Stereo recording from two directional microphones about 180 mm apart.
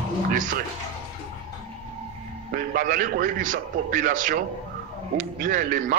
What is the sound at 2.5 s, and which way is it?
A man's voice, 50° right (ahead or behind).